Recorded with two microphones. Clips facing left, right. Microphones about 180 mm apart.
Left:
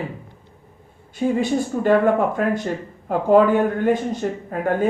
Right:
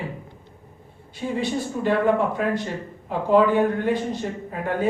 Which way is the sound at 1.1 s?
50° left (ahead or behind).